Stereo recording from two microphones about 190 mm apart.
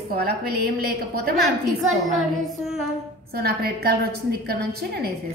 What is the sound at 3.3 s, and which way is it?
A woman's voice, 55° right (ahead or behind).